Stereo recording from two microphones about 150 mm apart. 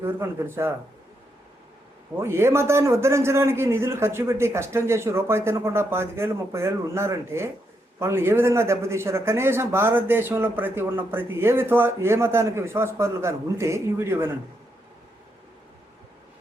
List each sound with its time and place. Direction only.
0.0 s a man's voice: 15° right (ahead or behind)
2.1 s a man's voice: 15° right (ahead or behind)